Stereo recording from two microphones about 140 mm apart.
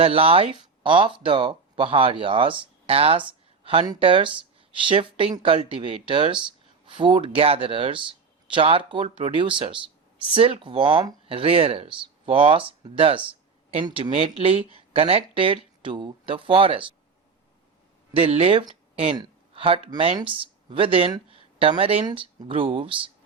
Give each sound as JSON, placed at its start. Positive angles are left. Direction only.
{"t": 0.0, "sound": "speech", "side_deg": -40}
{"t": 18.2, "sound": "speech", "side_deg": -45}
{"t": 19.1, "sound": "a sound", "side_deg": -35}
{"t": 20.3, "sound": "speech", "side_deg": -40}
{"t": 21.3, "sound": "a sound", "side_deg": -40}
{"t": 22.0, "sound": "speech", "side_deg": -35}